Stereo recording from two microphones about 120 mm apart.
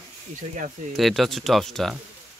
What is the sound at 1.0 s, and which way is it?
Speech, centre (ahead or behind).